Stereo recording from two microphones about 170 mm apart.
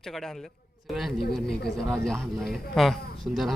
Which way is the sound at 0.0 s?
Centre (ahead or behind).